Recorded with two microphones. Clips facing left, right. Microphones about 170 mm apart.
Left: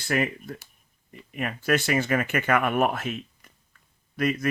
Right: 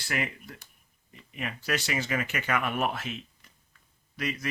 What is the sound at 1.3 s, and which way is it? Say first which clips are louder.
Speech: left 7 dB; 50° left (ahead or behind).